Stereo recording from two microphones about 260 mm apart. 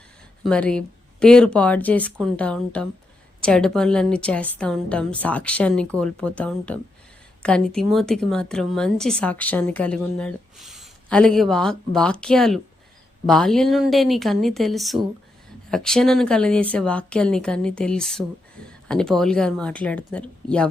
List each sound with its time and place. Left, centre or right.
0.4 s a woman's voice: centre